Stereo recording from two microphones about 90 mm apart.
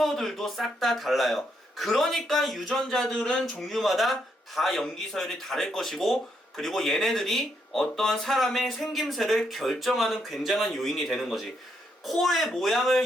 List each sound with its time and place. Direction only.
0.0 s speech: centre (ahead or behind)